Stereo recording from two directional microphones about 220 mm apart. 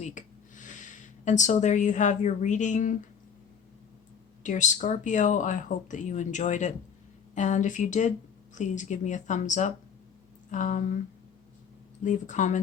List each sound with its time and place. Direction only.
0.0 s speech: 35° left (ahead or behind)
4.4 s speech: 35° left (ahead or behind)
12.0 s speech: 35° left (ahead or behind)